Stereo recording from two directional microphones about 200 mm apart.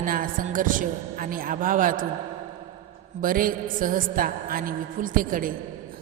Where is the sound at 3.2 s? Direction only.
45° right (ahead or behind).